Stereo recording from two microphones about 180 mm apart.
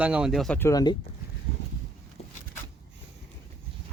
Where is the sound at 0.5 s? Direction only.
15° left (ahead or behind).